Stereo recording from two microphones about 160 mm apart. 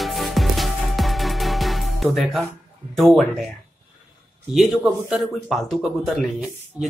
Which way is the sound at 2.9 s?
Centre (ahead or behind).